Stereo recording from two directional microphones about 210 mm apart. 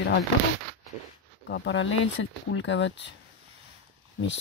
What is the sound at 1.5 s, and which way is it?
Speech, 60° left (ahead or behind).